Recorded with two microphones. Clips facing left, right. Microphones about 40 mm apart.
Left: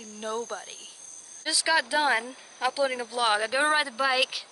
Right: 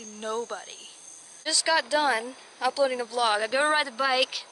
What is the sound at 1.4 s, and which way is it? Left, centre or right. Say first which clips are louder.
Speech: even; centre.